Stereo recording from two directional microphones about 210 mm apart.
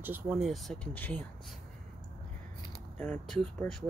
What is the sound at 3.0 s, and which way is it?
Speech, 5° left (ahead or behind).